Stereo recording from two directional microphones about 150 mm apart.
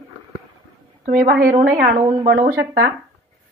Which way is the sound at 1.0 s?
60° right (ahead or behind).